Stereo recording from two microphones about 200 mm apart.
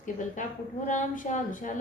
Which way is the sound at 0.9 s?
40° left (ahead or behind).